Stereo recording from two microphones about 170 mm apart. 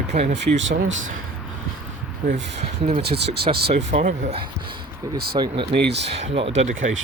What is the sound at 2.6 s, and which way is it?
Speech, 40° right (ahead or behind).